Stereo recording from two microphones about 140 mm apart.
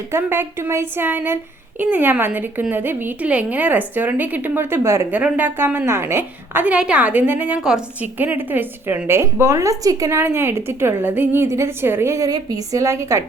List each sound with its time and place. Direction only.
0.1 s a woman's voice: 15° right (ahead or behind)